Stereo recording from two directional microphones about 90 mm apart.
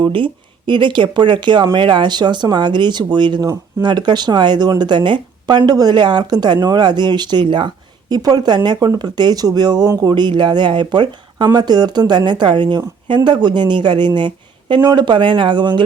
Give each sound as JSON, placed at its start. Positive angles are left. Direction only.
{"t": 0.0, "sound": "speech", "side_deg": -70}
{"t": 3.4, "sound": "speech", "side_deg": -40}
{"t": 3.8, "sound": "speech", "side_deg": -55}